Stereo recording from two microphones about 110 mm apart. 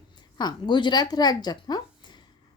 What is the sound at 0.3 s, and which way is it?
Speech, 40° left (ahead or behind).